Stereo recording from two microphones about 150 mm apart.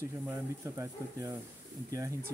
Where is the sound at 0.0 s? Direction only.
20° right (ahead or behind).